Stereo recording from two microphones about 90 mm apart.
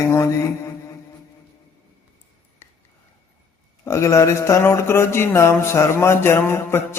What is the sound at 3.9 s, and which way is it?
Speech, 35° left (ahead or behind).